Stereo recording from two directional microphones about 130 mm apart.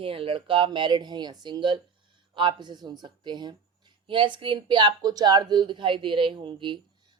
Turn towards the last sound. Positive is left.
turn(degrees=-40)  # may be behind; listen again after turning